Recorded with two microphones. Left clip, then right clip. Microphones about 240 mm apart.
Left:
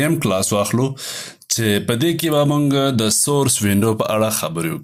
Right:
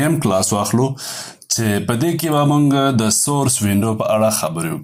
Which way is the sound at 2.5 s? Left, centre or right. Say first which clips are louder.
Right 2 dB; left.